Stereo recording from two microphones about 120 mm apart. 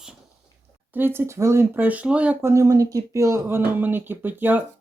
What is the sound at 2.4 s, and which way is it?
Speech, 25° right (ahead or behind).